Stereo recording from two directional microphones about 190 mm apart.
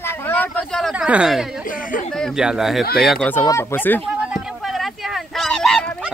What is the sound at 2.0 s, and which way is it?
Speech, 5° left (ahead or behind).